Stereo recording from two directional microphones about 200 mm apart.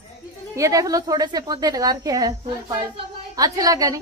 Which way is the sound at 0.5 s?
15° right (ahead or behind).